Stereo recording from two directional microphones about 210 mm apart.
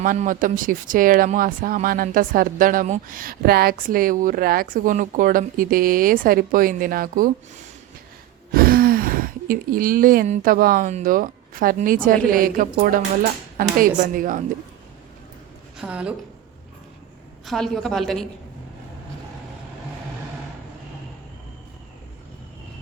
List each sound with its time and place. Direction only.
0.0 s speech: 40° right (ahead or behind)
8.5 s speech: 45° right (ahead or behind)
15.8 s a woman's voice: 5° right (ahead or behind)
17.4 s a woman's voice: centre (ahead or behind)